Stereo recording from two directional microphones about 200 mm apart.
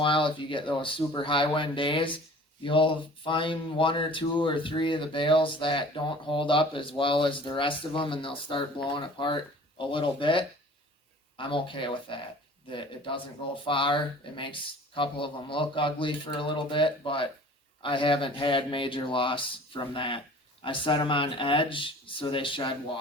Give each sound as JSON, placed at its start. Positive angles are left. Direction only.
{"t": 0.0, "sound": "speech", "side_deg": 25}
{"t": 13.7, "sound": "speech", "side_deg": 25}